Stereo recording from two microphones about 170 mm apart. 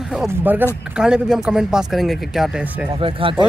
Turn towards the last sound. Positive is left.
turn(degrees=-30)  # may be behind; listen again after turning